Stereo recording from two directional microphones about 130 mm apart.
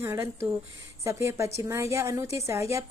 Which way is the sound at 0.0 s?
20° right (ahead or behind).